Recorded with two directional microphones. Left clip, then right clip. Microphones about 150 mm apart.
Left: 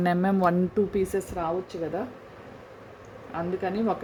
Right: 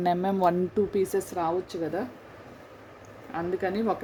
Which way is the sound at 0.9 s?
10° right (ahead or behind).